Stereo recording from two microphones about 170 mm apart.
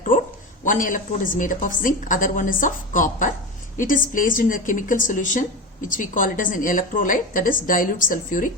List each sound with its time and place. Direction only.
0.6 s a woman's voice: 50° left (ahead or behind)